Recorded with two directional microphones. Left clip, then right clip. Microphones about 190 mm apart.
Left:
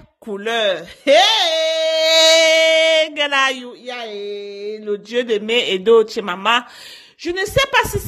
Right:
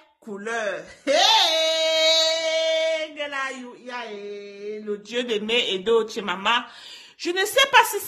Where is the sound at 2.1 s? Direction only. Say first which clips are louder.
Left 10 dB; 40° left (ahead or behind).